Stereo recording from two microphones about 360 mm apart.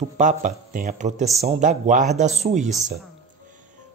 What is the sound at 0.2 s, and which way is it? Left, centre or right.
Speech, right.